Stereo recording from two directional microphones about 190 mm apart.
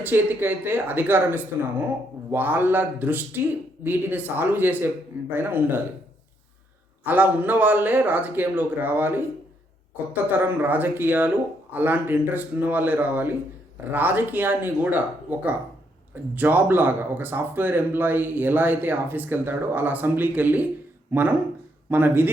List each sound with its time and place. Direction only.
0.0 s speech: 10° right (ahead or behind)
7.0 s speech: 10° right (ahead or behind)